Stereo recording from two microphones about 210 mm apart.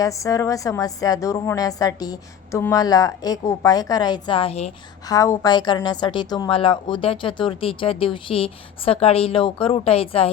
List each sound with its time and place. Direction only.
0.0 s a woman's voice: 15° left (ahead or behind)
5.0 s a woman's voice: 15° left (ahead or behind)